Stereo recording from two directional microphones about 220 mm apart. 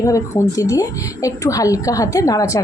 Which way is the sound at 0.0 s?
15° left (ahead or behind).